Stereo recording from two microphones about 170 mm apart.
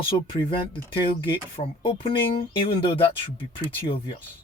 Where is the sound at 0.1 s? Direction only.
30° left (ahead or behind).